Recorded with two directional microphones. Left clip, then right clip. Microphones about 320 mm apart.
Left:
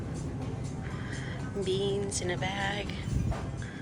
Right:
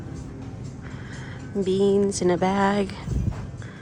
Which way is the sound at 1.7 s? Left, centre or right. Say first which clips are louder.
Right 11 dB; centre.